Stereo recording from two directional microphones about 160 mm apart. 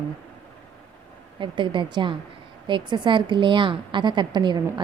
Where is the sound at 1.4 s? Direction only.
30° right (ahead or behind).